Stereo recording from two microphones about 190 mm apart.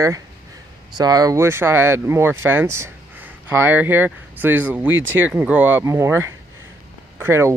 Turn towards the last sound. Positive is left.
turn(degrees=-15)  # may be behind; listen again after turning